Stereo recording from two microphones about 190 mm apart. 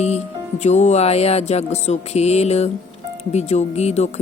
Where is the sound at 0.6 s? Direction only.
35° left (ahead or behind).